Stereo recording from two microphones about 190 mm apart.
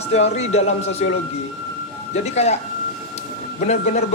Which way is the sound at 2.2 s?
35° left (ahead or behind).